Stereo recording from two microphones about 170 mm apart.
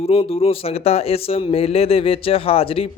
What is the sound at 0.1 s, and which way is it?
Speech, 35° left (ahead or behind).